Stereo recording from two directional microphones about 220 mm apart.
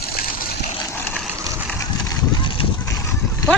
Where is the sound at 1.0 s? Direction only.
5° left (ahead or behind).